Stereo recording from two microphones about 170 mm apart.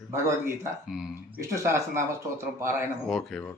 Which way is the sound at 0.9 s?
5° right (ahead or behind).